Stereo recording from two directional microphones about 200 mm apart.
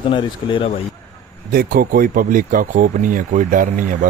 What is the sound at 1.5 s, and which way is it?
Speech, 45° right (ahead or behind).